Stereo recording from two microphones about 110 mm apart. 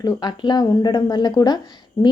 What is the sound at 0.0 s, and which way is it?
A woman's voice, 35° left (ahead or behind).